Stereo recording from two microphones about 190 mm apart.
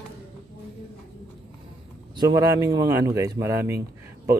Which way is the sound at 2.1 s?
15° right (ahead or behind).